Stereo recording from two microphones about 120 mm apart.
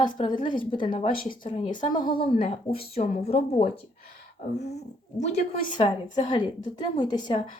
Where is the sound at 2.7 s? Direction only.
50° left (ahead or behind).